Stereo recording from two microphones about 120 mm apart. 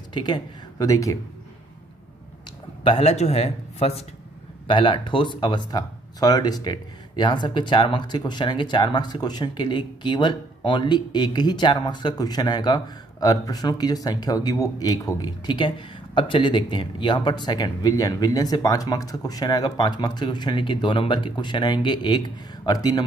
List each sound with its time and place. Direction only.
0.1 s speech: 35° left (ahead or behind)
2.8 s speech: 55° left (ahead or behind)
4.6 s speech: 45° left (ahead or behind)